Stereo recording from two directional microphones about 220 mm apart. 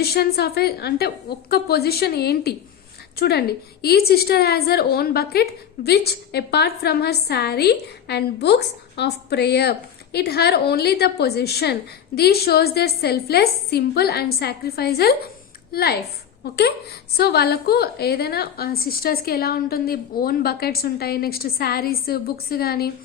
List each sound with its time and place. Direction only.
0.0 s a woman's voice: 45° left (ahead or behind)